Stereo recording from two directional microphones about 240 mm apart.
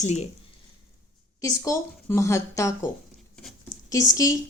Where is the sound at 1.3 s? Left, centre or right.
Centre.